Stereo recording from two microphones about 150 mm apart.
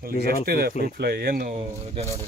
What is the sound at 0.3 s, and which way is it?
Speech, 90° right.